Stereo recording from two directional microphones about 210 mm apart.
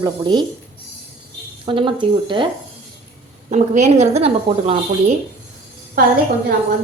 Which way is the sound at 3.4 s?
35° right (ahead or behind).